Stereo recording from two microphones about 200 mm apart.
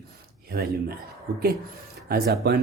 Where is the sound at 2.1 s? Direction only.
50° right (ahead or behind).